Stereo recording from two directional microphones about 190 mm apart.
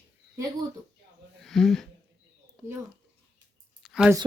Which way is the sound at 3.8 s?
Centre (ahead or behind).